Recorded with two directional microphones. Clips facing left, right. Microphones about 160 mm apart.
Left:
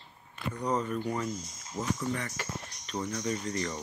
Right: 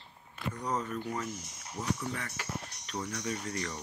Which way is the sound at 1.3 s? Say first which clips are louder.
Left 4 dB; 65° right (ahead or behind).